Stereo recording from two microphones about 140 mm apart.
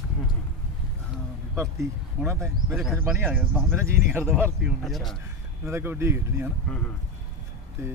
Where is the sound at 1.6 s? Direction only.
20° right (ahead or behind).